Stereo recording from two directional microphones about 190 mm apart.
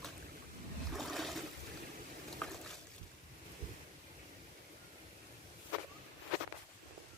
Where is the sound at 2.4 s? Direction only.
5° left (ahead or behind).